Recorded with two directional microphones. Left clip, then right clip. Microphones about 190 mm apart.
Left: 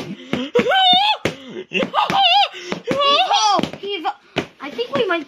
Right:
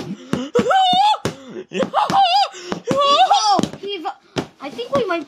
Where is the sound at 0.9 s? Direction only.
5° right (ahead or behind).